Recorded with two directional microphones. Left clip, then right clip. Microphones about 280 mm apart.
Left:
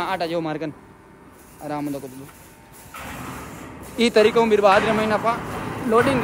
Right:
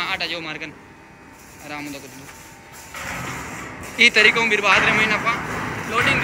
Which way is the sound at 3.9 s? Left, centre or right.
Centre.